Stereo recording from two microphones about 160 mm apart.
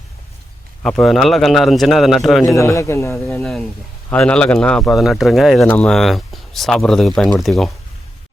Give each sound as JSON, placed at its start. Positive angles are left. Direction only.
{"t": 0.8, "sound": "speech", "side_deg": 5}
{"t": 2.6, "sound": "a man's voice", "side_deg": 20}
{"t": 3.2, "sound": "a man's voice", "side_deg": 0}